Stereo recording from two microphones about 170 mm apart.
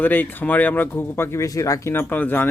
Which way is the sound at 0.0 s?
10° left (ahead or behind).